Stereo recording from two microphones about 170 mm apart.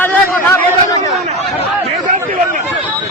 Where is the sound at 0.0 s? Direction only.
15° left (ahead or behind).